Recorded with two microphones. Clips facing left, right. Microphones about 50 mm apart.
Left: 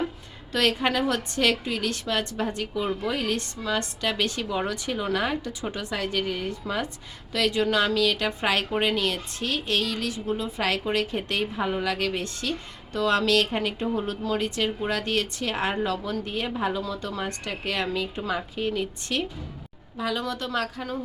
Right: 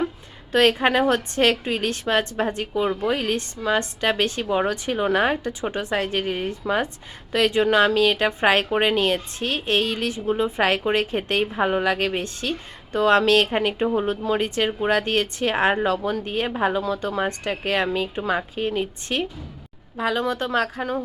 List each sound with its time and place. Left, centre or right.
0.5 s a woman's voice: right